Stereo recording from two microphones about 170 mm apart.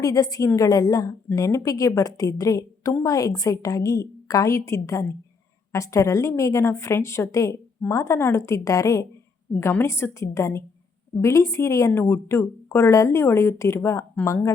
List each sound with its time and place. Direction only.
0.0 s a woman's voice: 20° left (ahead or behind)